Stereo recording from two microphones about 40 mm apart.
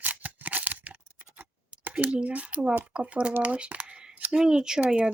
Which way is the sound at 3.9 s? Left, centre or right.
Right.